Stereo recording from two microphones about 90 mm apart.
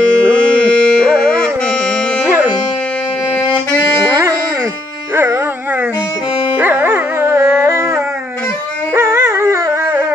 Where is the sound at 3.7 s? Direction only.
25° left (ahead or behind).